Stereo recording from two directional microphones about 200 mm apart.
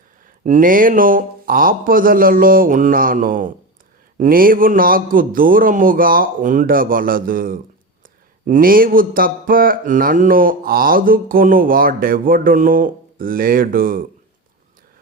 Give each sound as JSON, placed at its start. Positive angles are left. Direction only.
{"t": 0.4, "sound": "mantra", "side_deg": -40}